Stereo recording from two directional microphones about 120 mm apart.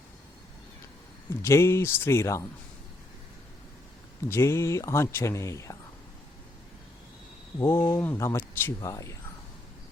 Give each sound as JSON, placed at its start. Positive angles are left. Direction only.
{"t": 1.3, "sound": "speech", "side_deg": 25}
{"t": 4.3, "sound": "speech", "side_deg": 20}
{"t": 7.6, "sound": "speech", "side_deg": 20}